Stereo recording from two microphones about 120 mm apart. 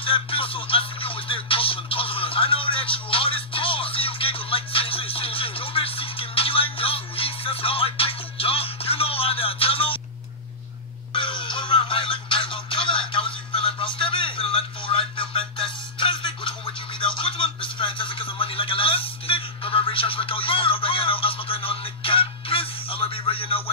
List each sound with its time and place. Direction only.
0.0 s music: 50° left (ahead or behind)
11.1 s music: 45° left (ahead or behind)
17.2 s a sound: 45° left (ahead or behind)